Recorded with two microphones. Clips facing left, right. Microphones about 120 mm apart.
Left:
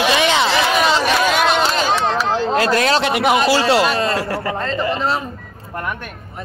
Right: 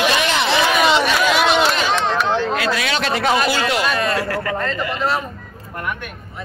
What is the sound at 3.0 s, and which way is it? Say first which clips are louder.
Speech: left 3 dB; 20° left (ahead or behind).